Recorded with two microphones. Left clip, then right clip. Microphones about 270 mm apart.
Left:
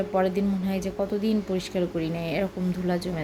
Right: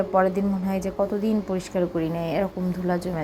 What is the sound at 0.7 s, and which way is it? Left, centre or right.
A woman's voice, centre.